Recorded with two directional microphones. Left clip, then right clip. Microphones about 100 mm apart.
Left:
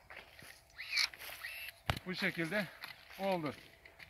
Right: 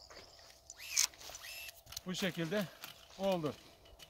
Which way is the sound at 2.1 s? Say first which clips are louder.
Right 1 dB; 20° right (ahead or behind).